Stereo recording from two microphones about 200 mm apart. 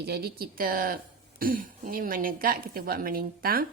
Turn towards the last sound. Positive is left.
turn(degrees=-45)  # may be behind; listen again after turning